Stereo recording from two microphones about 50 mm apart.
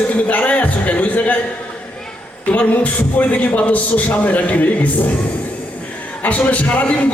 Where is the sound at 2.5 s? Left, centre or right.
Left.